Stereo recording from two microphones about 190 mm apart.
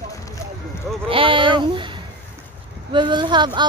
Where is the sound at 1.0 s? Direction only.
30° right (ahead or behind).